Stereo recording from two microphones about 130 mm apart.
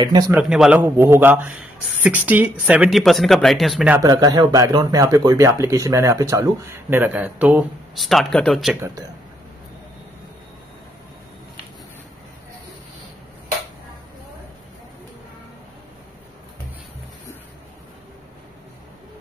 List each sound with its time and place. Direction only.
0.0 s a man's voice: 30° right (ahead or behind)
0.3 s a man's voice: 5° right (ahead or behind)
3.0 s speech: centre (ahead or behind)
4.0 s speech: 30° right (ahead or behind); by 7.6 s 10° right (ahead or behind)
7.9 s speech: centre (ahead or behind)